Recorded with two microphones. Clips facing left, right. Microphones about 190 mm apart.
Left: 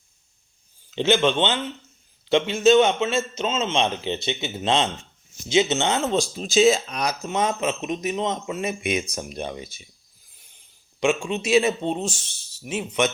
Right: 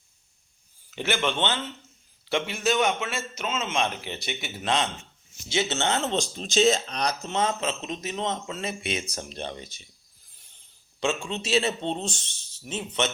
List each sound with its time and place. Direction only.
0.9 s a man's voice: 20° left (ahead or behind)
11.0 s speech: 15° left (ahead or behind)